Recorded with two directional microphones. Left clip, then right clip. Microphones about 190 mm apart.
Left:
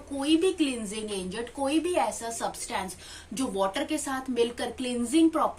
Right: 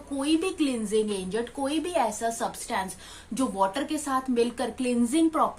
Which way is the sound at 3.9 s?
30° right (ahead or behind).